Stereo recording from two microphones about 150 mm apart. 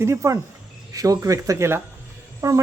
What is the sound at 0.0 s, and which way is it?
A man's voice, 20° right (ahead or behind).